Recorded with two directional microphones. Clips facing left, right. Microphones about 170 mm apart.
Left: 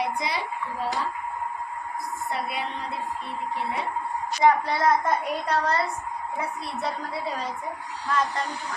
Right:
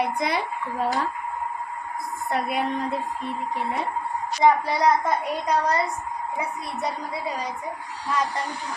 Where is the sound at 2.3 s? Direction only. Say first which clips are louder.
Right 6 dB; 50° right (ahead or behind).